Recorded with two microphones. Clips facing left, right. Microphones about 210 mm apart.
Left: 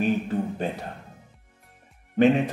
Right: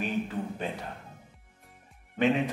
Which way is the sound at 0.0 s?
40° left (ahead or behind).